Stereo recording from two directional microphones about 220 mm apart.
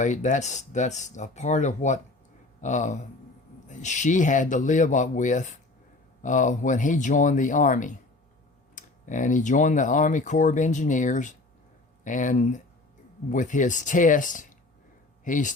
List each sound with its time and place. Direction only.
0.0 s speech: 35° left (ahead or behind)